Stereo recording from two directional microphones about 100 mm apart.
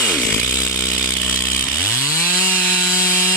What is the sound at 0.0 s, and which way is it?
Chainsaw, 15° left (ahead or behind).